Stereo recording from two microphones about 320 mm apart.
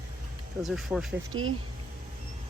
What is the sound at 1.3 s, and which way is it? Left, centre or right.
Speech, right.